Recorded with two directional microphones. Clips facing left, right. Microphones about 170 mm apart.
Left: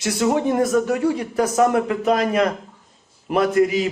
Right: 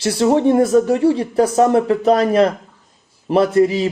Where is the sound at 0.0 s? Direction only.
30° right (ahead or behind).